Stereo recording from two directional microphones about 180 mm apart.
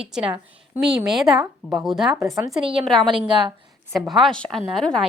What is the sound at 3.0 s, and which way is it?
Speech, 30° right (ahead or behind).